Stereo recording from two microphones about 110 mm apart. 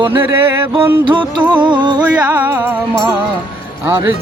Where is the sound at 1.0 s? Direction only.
45° right (ahead or behind).